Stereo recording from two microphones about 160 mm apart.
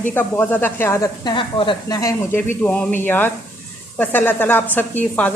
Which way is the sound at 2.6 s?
10° left (ahead or behind).